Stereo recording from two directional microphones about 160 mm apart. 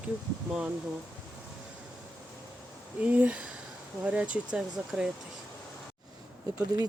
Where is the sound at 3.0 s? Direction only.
10° right (ahead or behind).